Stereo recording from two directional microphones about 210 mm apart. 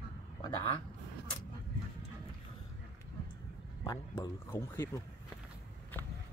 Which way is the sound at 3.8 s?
20° left (ahead or behind).